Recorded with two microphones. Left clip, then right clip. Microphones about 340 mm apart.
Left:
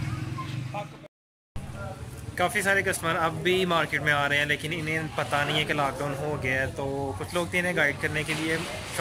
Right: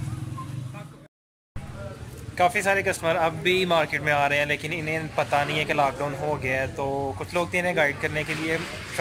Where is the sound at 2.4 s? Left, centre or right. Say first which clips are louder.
Right 3 dB; centre.